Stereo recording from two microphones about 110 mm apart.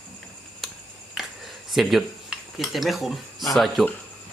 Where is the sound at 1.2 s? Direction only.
5° right (ahead or behind).